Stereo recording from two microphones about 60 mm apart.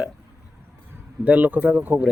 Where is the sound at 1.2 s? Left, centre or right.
Right.